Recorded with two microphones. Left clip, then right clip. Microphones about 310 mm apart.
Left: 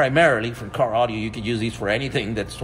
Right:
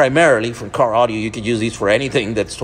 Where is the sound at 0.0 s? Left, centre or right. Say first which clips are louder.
Right 5 dB; centre.